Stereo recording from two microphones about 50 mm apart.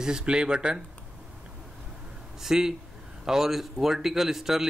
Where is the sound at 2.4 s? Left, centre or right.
Centre.